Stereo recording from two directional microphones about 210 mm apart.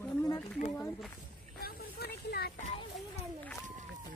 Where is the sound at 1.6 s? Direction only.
50° left (ahead or behind).